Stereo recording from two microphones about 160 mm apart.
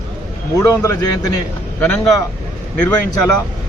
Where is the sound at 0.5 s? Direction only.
20° left (ahead or behind).